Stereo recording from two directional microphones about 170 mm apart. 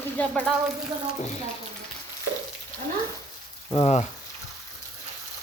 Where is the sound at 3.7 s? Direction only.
35° left (ahead or behind).